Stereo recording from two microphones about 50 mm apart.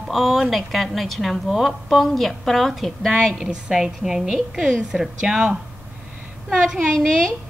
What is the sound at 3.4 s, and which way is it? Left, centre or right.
A woman's voice, centre.